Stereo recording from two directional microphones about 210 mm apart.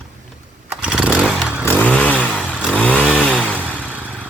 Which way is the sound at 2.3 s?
5° right (ahead or behind).